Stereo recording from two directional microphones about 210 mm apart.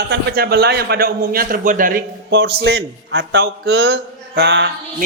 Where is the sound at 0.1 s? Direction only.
50° right (ahead or behind).